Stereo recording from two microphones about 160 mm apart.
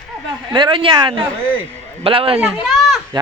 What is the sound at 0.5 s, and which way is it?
Speech, 30° right (ahead or behind).